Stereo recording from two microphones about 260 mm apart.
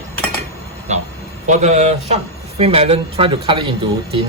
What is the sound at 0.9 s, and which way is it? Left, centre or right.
Speech, right.